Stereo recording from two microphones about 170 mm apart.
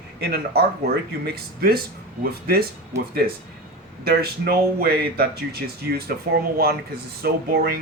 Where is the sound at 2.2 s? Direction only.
60° right (ahead or behind).